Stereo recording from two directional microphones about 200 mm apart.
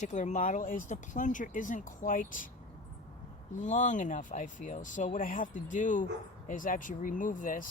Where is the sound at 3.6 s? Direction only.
35° left (ahead or behind).